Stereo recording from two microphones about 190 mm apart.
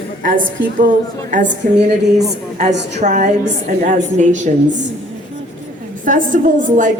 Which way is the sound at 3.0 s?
40° right (ahead or behind).